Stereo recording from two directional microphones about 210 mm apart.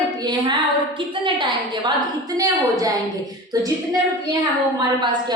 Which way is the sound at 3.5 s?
15° right (ahead or behind).